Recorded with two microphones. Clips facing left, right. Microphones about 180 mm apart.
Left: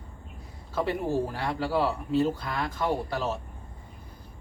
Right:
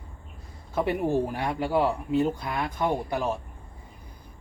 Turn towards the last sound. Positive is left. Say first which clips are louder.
# right 2 dB
turn(degrees=-15)  # may be behind; listen again after turning